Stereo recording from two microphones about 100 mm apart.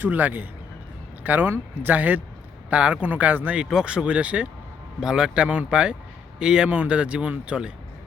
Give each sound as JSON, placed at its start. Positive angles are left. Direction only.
{"t": 0.0, "sound": "speech", "side_deg": -20}